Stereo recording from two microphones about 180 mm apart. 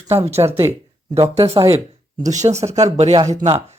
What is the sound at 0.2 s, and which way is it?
Speech, 35° right (ahead or behind).